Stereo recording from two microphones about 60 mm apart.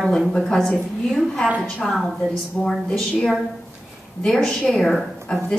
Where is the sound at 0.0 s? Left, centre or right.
Centre.